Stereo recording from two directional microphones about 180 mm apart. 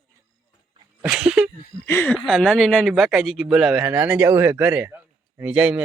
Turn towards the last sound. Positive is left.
turn(degrees=-5)  # may be behind; listen again after turning